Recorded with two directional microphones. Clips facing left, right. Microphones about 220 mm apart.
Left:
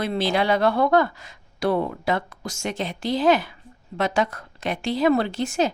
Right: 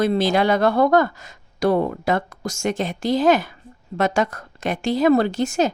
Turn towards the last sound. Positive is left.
turn(degrees=-45)  # may be behind; listen again after turning